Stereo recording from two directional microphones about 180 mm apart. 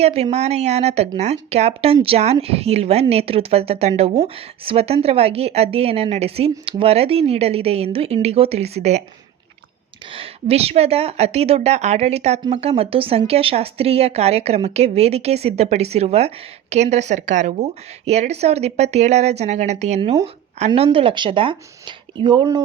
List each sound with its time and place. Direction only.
0.0 s a woman's voice: 35° right (ahead or behind)
10.1 s a woman's voice: 30° right (ahead or behind)